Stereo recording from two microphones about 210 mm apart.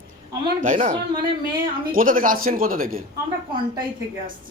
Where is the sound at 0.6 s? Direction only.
35° right (ahead or behind).